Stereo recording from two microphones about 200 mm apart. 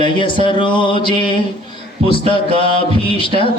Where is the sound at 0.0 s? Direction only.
25° left (ahead or behind).